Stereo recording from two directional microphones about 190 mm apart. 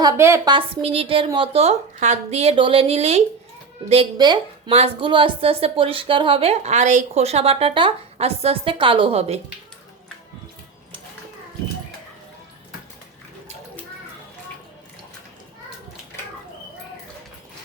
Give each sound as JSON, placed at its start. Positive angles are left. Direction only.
{"t": 0.0, "sound": "a woman's voice", "side_deg": -15}
{"t": 0.7, "sound": "a woman's voice", "side_deg": -30}